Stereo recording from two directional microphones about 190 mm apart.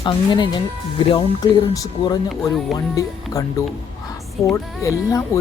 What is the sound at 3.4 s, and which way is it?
Speech, 15° left (ahead or behind).